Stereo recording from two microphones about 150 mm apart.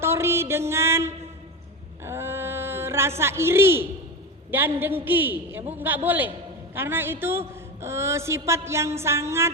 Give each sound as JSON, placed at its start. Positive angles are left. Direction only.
{"t": 0.0, "sound": "music", "side_deg": -15}
{"t": 2.0, "sound": "a sound", "side_deg": -15}
{"t": 4.5, "sound": "a woman's voice", "side_deg": -15}